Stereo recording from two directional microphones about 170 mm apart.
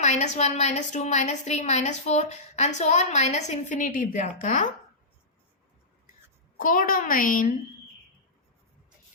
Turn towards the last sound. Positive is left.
turn(degrees=50)  # may be behind; listen again after turning